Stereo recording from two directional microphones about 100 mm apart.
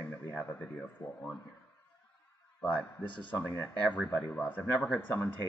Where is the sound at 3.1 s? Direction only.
55° left (ahead or behind).